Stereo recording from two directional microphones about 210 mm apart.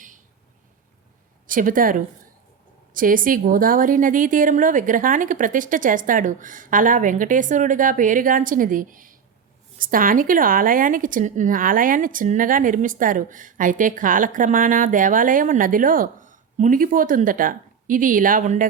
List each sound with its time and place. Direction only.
1.5 s a woman's voice: 40° right (ahead or behind)